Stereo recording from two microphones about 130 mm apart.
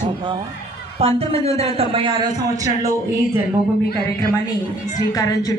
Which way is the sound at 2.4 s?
25° right (ahead or behind).